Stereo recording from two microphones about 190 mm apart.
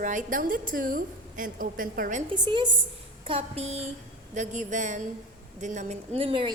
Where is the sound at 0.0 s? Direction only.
40° right (ahead or behind).